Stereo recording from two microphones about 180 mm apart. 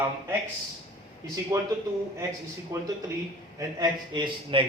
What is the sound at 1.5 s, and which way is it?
Speech, 15° right (ahead or behind).